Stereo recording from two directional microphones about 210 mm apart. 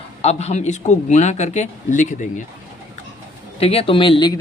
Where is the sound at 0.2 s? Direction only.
30° left (ahead or behind).